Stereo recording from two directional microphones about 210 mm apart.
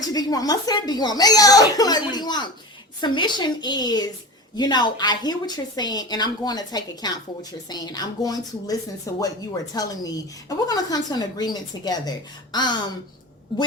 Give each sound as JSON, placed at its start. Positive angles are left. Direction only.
{"t": 0.0, "sound": "a woman's voice", "side_deg": 15}